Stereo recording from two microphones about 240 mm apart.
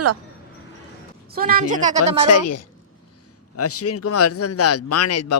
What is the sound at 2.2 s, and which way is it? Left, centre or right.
Speech, left.